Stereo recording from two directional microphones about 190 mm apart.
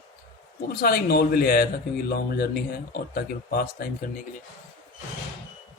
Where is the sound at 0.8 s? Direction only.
55° left (ahead or behind).